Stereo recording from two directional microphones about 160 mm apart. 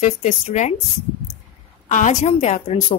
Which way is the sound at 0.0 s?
50° left (ahead or behind).